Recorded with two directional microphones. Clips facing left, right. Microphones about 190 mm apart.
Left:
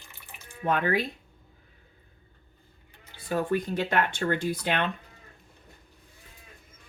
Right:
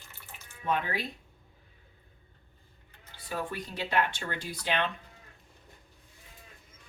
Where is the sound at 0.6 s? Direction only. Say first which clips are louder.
Left 5 dB; 60° left (ahead or behind).